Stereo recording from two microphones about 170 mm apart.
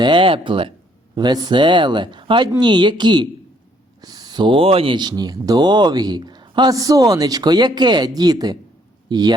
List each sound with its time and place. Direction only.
0.0 s speech: 30° right (ahead or behind)